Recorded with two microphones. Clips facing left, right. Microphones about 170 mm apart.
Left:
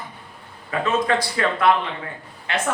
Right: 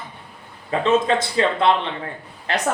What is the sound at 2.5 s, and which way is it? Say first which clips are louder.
Speech: right 2 dB; 35° right (ahead or behind).